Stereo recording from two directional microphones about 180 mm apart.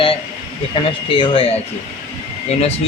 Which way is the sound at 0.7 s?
30° left (ahead or behind).